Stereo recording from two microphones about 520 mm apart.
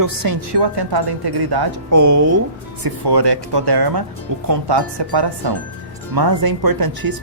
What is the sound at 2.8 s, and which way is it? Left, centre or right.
A woman's voice, right.